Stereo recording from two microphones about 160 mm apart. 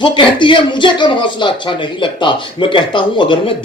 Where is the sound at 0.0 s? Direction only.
30° left (ahead or behind).